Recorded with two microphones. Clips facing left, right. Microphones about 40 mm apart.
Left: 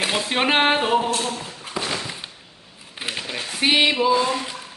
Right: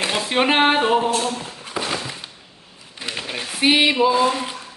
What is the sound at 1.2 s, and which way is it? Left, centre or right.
Dog, centre.